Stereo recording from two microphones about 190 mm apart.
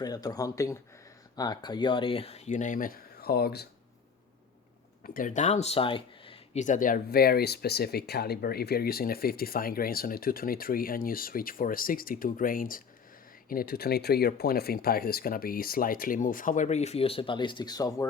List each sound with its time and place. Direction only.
0.0 s speech: 20° left (ahead or behind); by 3.7 s 55° left (ahead or behind)
5.0 s speech: 45° left (ahead or behind); by 18.0 s 20° left (ahead or behind)